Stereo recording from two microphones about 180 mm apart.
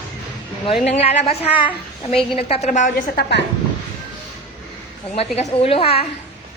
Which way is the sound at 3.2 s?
65° left (ahead or behind).